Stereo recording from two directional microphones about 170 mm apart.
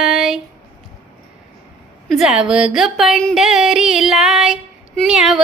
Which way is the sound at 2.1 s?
5° right (ahead or behind).